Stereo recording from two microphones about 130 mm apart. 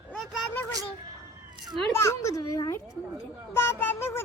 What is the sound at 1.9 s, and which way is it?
A child's voice, 20° left (ahead or behind).